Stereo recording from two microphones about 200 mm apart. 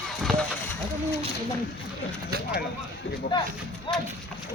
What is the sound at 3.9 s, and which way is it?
Speech, 25° left (ahead or behind).